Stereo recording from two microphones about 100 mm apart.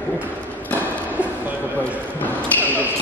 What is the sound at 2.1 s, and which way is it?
Basketball bounce, 20° left (ahead or behind).